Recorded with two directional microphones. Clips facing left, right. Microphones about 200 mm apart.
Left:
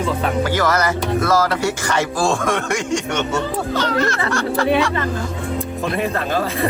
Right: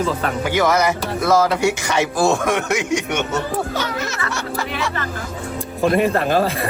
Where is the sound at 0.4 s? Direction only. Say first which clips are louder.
Right 4 dB; 10° right (ahead or behind).